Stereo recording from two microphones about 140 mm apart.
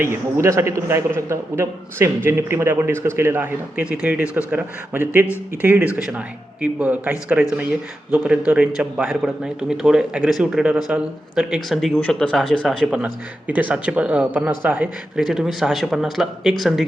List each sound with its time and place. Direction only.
0.0 s a man's voice: 20° right (ahead or behind); by 11.9 s centre (ahead or behind)
11.9 s speech: 10° left (ahead or behind)
12.6 s a man's voice: centre (ahead or behind)